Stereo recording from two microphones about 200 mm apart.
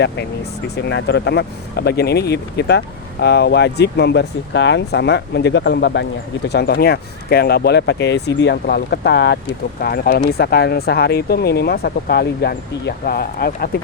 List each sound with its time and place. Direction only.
0.9 s speech: 60° left (ahead or behind)